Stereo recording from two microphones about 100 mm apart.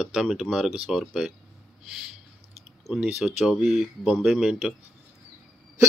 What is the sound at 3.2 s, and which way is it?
Speech, 5° right (ahead or behind).